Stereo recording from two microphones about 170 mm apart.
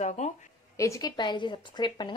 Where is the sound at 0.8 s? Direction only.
20° left (ahead or behind).